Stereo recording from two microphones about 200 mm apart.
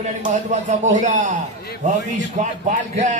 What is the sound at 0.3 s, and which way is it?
A man's voice, 35° right (ahead or behind).